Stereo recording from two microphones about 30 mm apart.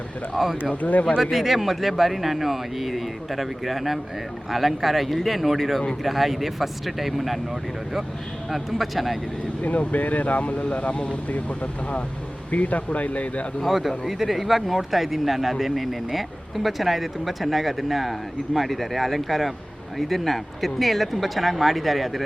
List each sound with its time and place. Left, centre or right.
0.4 s speech: centre
0.8 s speech: left
1.2 s speech: centre
8.4 s speech: centre
9.6 s speech: left
13.7 s speech: centre